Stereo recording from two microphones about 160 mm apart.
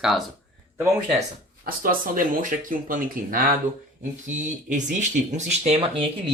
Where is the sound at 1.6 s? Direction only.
60° right (ahead or behind).